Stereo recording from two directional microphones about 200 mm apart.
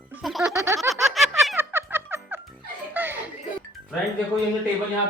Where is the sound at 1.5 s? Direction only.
10° right (ahead or behind).